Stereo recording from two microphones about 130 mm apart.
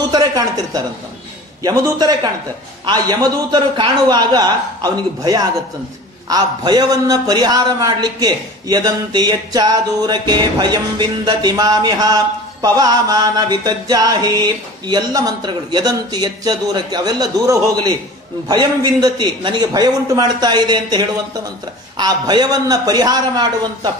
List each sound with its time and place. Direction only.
0.1 s a man's voice: 30° right (ahead or behind)